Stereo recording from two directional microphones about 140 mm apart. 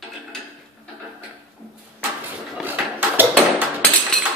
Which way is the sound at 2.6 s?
15° right (ahead or behind).